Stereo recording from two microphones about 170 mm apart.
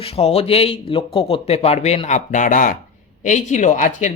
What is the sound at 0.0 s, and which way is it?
A woman's voice, 35° left (ahead or behind).